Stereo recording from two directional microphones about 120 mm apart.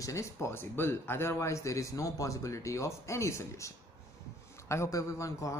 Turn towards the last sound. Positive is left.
turn(degrees=25)  # may be behind; listen again after turning